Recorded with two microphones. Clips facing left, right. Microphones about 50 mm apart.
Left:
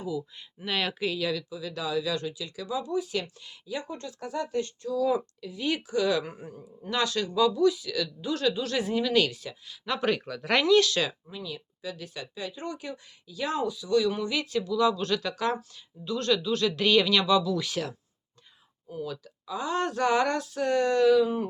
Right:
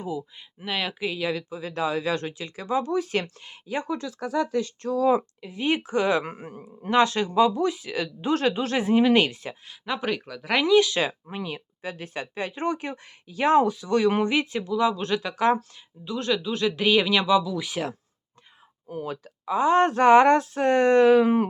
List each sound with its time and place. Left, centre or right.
0.2 s speech: centre
1.3 s speech: right
5.4 s speech: right
6.9 s speech: right
9.8 s speech: centre
11.3 s speech: right
14.3 s speech: right
19.0 s speech: right